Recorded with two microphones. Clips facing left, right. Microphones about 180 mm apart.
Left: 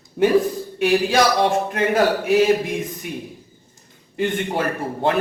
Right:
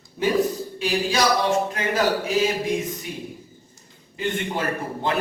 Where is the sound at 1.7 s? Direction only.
55° left (ahead or behind).